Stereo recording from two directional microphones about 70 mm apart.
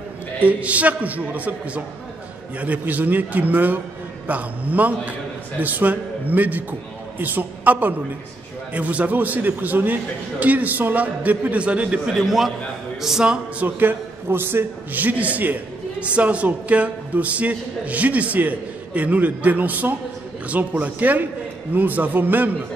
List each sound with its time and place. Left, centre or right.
0.4 s a man's voice: right
12.2 s a man's voice: centre
13.7 s a man's voice: right